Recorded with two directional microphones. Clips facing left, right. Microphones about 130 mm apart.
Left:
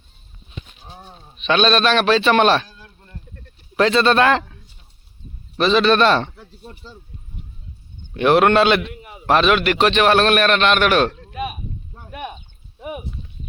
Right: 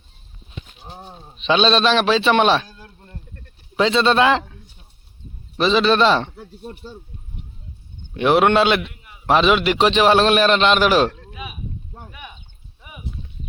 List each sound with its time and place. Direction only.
0.9 s a man's voice: 25° right (ahead or behind)
2.6 s a sound: 30° right (ahead or behind)
3.8 s speech: 15° right (ahead or behind)
5.5 s speech: 15° right (ahead or behind)
8.1 s a man's voice: 10° right (ahead or behind); by 11.1 s 25° right (ahead or behind)
12.8 s clip-clop: 55° left (ahead or behind)